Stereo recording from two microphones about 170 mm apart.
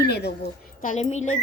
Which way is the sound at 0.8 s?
45° left (ahead or behind).